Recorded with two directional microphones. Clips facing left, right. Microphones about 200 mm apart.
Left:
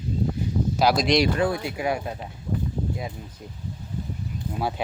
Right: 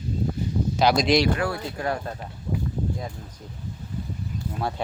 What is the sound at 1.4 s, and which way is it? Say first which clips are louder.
Speech: left 3 dB; 15° left (ahead or behind).